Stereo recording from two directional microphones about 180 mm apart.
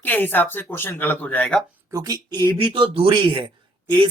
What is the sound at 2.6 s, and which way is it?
A man's voice, 30° right (ahead or behind).